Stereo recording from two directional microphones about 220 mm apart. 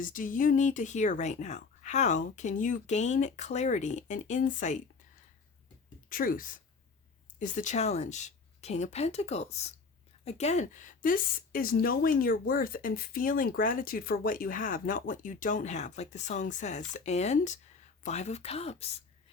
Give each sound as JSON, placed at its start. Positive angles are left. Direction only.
{"t": 0.0, "sound": "speech", "side_deg": 35}
{"t": 6.1, "sound": "speech", "side_deg": 40}